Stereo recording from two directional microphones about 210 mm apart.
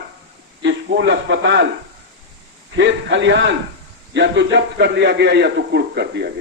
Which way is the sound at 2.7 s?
60° right (ahead or behind).